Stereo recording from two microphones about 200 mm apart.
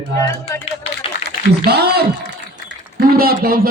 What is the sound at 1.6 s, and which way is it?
A man's voice, 55° right (ahead or behind).